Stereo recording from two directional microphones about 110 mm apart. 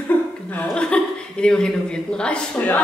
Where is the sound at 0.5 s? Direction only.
10° left (ahead or behind).